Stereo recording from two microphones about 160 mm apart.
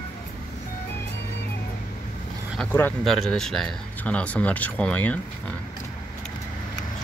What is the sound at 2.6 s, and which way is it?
Speech, 10° left (ahead or behind).